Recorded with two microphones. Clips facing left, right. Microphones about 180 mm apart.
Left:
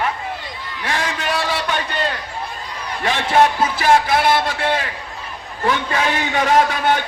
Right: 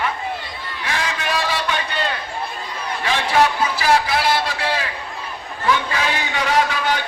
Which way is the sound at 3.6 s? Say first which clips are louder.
Left 2 dB; 50° left (ahead or behind).